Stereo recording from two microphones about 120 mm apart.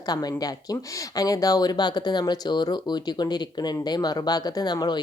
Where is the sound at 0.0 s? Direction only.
35° left (ahead or behind).